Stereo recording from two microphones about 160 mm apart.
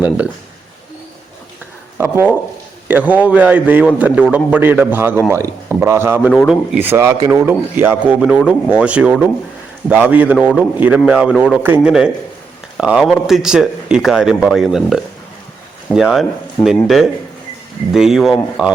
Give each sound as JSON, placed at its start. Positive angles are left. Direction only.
{"t": 2.0, "sound": "speech", "side_deg": -15}
{"t": 6.3, "sound": "speech", "side_deg": 0}